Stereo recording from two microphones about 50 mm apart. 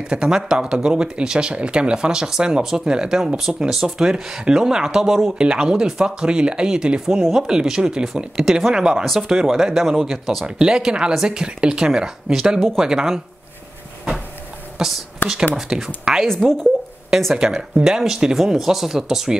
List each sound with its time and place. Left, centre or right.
0.0 s speech: centre
9.0 s speech: centre
9.3 s speech: centre
10.4 s speech: centre
14.8 s a woman's voice: centre
17.4 s speech: centre